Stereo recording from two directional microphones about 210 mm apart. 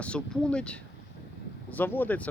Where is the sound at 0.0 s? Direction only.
5° left (ahead or behind).